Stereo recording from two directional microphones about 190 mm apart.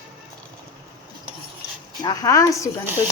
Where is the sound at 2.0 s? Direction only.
20° left (ahead or behind).